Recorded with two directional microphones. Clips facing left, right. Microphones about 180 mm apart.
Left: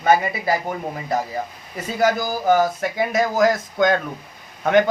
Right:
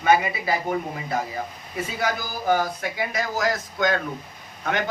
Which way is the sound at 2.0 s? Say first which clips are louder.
Left 10 dB; 45° left (ahead or behind).